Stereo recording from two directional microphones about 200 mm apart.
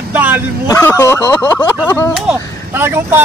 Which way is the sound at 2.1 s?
10° right (ahead or behind).